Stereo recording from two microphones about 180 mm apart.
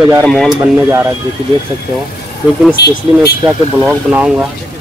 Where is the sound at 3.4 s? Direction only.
10° right (ahead or behind).